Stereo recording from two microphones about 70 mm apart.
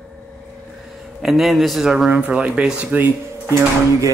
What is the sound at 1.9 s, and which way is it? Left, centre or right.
Speech, centre.